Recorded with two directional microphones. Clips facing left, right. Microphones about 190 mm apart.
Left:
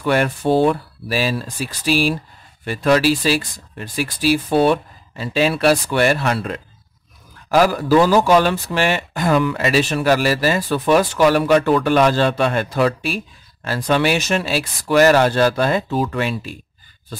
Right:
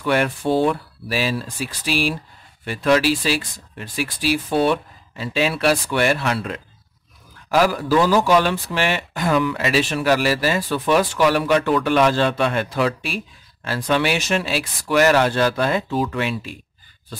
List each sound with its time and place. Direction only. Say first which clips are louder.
0.0 s speech: left 2 dB; 40° left (ahead or behind)
7.5 s a man's voice: left 3 dB; 45° left (ahead or behind)